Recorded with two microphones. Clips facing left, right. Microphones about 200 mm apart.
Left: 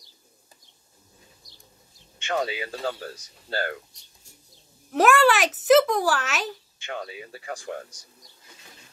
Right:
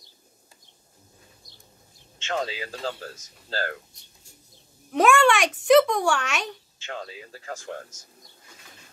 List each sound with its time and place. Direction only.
2.3 s speech: centre (ahead or behind)
4.9 s speech: 5° left (ahead or behind)